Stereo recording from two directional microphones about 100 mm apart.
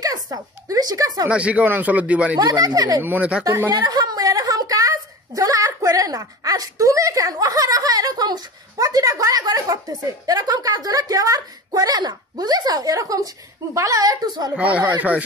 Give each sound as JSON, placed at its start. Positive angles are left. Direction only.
{"t": 0.0, "sound": "speech", "side_deg": -35}
{"t": 1.2, "sound": "speech", "side_deg": -10}
{"t": 2.3, "sound": "a woman's voice", "side_deg": -40}
{"t": 3.0, "sound": "speech", "side_deg": -15}
{"t": 3.7, "sound": "a woman's voice", "side_deg": -40}
{"t": 14.5, "sound": "speech", "side_deg": -15}